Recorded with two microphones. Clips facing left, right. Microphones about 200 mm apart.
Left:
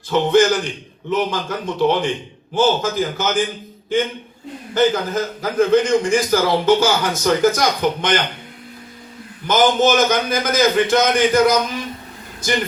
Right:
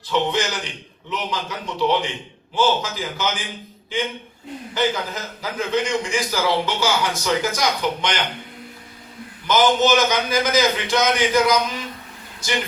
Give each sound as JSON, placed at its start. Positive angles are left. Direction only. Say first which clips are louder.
{"t": 0.1, "sound": "a man's voice", "louder": "left 8 dB", "side_deg": 50}
{"t": 9.5, "sound": "a man's voice", "louder": "left 2 dB", "side_deg": 50}